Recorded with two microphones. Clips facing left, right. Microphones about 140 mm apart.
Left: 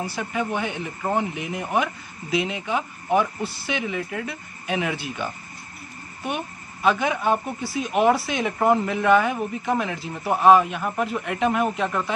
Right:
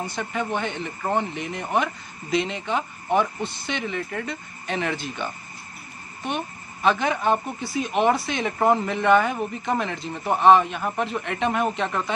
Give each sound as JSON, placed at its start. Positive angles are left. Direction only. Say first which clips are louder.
{"t": 0.0, "sound": "a woman's voice", "louder": "left 1 dB", "side_deg": 5}